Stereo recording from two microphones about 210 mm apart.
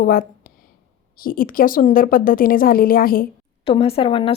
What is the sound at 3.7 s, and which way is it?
Speech, 25° left (ahead or behind).